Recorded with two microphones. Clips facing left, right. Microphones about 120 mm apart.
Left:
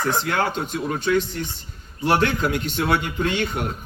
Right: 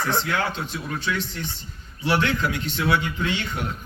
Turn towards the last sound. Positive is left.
turn(degrees=45)  # may be behind; listen again after turning